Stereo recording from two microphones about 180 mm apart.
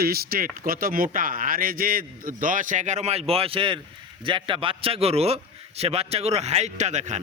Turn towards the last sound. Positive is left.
turn(degrees=-40)  # may be behind; listen again after turning